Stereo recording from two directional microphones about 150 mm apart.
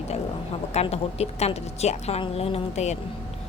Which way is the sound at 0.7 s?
45° left (ahead or behind).